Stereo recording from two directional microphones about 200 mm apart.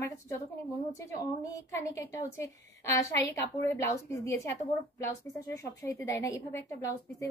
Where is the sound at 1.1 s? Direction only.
15° left (ahead or behind).